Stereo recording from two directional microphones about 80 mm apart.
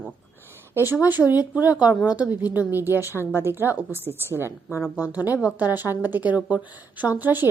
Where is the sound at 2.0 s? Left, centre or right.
Centre.